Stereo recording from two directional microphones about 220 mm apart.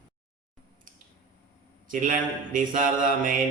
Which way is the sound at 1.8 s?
40° right (ahead or behind).